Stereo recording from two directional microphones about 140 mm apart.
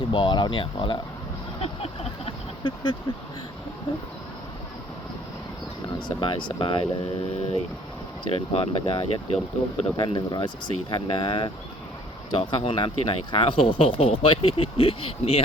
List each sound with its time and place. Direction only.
0.1 s speech: 35° left (ahead or behind)
1.6 s a sound: 40° left (ahead or behind)
6.1 s speech: 40° left (ahead or behind)